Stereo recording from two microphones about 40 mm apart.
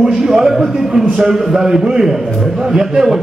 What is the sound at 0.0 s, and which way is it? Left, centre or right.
A man's voice, centre.